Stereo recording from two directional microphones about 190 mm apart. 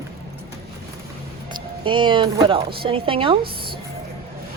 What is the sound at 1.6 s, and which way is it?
Speech, 25° right (ahead or behind).